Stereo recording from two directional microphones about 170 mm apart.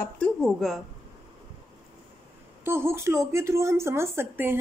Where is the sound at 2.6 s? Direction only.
15° right (ahead or behind).